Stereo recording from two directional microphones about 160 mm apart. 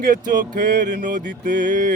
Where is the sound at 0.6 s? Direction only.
90° right.